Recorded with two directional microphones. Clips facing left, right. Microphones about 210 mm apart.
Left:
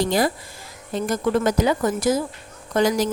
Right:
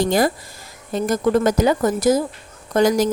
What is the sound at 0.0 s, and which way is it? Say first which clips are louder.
Speech: right 3 dB; 50° right (ahead or behind).